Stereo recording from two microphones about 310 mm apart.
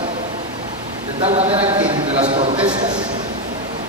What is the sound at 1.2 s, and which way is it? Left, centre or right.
Speech, centre.